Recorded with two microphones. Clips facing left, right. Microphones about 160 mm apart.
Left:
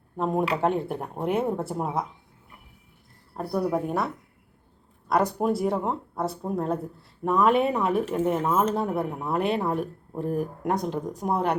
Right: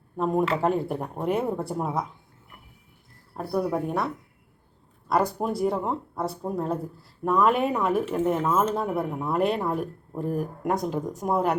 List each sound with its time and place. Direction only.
0.2 s speech: centre (ahead or behind)
3.3 s speech: centre (ahead or behind)